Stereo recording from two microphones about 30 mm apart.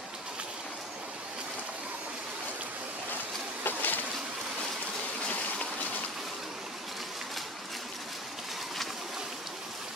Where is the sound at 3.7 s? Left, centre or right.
Left.